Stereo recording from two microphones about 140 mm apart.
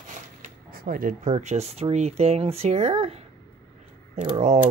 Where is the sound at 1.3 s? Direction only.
55° right (ahead or behind).